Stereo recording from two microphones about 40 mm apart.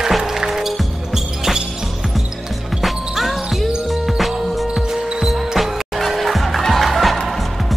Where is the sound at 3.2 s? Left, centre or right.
Centre.